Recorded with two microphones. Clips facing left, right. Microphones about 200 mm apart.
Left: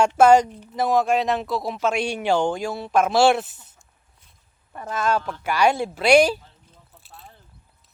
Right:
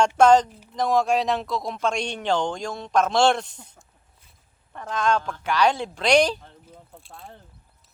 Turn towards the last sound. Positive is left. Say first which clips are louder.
# right 4 dB
turn(degrees=-50)  # may be behind; listen again after turning